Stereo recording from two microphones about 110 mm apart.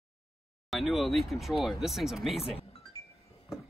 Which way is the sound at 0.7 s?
Centre (ahead or behind).